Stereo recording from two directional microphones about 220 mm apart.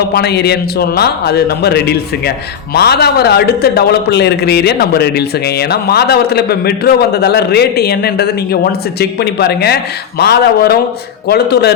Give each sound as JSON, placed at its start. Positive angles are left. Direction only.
{"t": 0.1, "sound": "a man's voice", "side_deg": 50}